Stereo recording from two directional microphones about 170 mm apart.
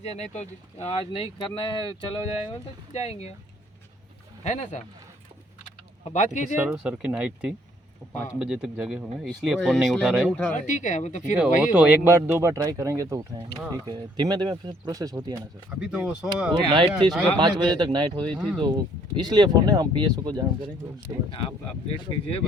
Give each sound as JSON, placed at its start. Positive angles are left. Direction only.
{"t": 0.0, "sound": "speech", "side_deg": 40}
{"t": 4.4, "sound": "speech", "side_deg": 45}
{"t": 6.1, "sound": "speech", "side_deg": 45}
{"t": 6.6, "sound": "speech", "side_deg": -5}
{"t": 10.5, "sound": "speech", "side_deg": 45}
{"t": 11.3, "sound": "speech", "side_deg": -5}
{"t": 15.8, "sound": "speech", "side_deg": -5}
{"t": 16.5, "sound": "speech", "side_deg": -30}
{"t": 18.3, "sound": "speech", "side_deg": 0}
{"t": 18.6, "sound": "speech", "side_deg": -25}